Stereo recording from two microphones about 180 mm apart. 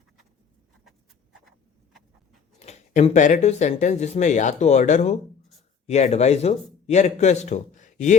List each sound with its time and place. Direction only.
2.6 s speech: 40° left (ahead or behind)